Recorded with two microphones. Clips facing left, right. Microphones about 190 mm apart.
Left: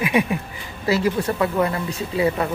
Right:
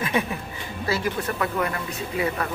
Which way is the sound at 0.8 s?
25° left (ahead or behind).